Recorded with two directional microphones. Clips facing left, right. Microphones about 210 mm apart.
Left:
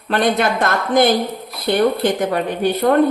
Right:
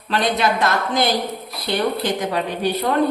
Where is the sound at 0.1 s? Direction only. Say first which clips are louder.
Left 3 dB; 50° left (ahead or behind).